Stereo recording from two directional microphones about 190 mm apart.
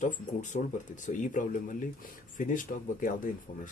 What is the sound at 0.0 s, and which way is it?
Speech, 40° left (ahead or behind).